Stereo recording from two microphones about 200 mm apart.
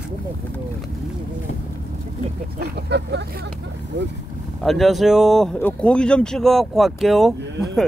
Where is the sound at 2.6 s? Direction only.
55° right (ahead or behind).